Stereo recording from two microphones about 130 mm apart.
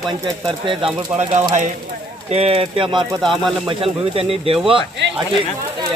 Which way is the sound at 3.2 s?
5° left (ahead or behind).